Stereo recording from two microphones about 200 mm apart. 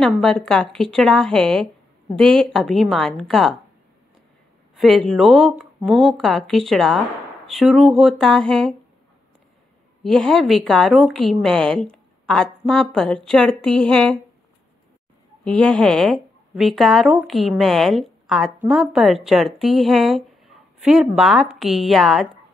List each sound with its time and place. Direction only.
0.0 s a woman's voice: centre (ahead or behind)
4.7 s a woman's voice: centre (ahead or behind)
10.0 s a woman's voice: centre (ahead or behind)
15.4 s a woman's voice: 5° left (ahead or behind)